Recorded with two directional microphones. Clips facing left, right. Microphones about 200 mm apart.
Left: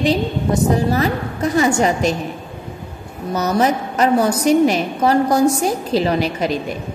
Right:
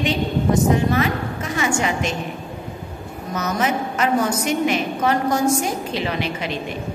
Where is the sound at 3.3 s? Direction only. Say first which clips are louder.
Left 5 dB; 35° left (ahead or behind).